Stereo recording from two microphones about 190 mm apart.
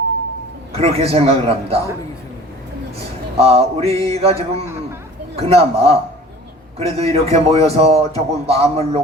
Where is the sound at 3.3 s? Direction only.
30° right (ahead or behind).